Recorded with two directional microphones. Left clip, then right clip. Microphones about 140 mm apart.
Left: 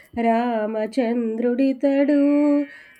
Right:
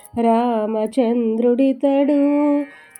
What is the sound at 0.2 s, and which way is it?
Speech, 35° right (ahead or behind).